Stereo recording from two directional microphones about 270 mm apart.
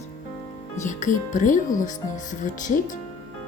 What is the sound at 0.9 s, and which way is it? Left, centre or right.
Speech, left.